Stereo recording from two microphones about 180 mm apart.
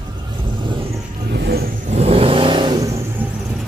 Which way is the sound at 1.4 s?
60° right (ahead or behind).